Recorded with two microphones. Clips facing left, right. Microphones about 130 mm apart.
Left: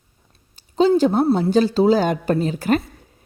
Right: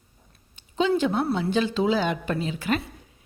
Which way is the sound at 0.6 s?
35° left (ahead or behind).